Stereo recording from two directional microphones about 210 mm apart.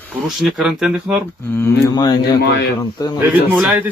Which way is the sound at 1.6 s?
20° left (ahead or behind).